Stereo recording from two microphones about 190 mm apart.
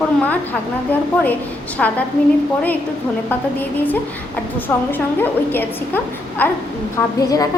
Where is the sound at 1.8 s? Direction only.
5° left (ahead or behind).